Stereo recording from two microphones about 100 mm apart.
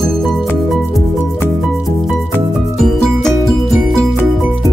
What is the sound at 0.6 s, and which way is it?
Music, centre (ahead or behind).